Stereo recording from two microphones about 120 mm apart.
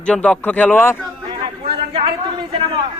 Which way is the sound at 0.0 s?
10° left (ahead or behind).